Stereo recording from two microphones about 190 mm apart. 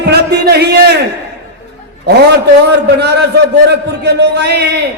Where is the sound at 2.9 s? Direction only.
60° right (ahead or behind).